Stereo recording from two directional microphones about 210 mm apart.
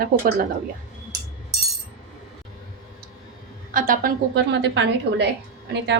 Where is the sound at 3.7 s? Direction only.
40° right (ahead or behind).